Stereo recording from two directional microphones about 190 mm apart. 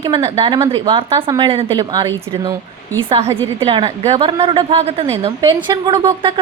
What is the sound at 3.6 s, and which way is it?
A woman's voice, 30° right (ahead or behind).